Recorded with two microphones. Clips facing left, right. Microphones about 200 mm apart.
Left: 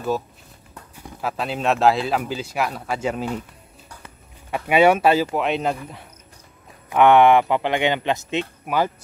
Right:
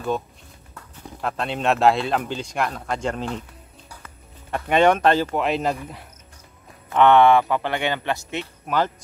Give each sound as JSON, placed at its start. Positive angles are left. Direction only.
{"t": 0.9, "sound": "speech", "side_deg": 5}
{"t": 4.5, "sound": "speech", "side_deg": 10}
{"t": 6.9, "sound": "speech", "side_deg": 15}